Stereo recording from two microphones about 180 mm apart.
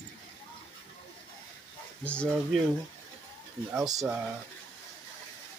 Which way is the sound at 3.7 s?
20° right (ahead or behind).